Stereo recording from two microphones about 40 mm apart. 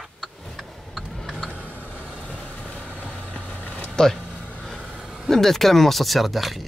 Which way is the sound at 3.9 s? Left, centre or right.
Centre.